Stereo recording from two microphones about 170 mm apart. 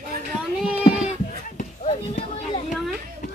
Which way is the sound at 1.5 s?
40° left (ahead or behind).